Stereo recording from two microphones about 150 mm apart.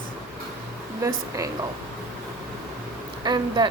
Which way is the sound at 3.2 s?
30° right (ahead or behind).